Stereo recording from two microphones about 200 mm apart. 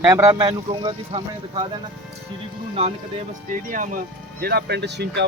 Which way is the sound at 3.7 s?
45° right (ahead or behind).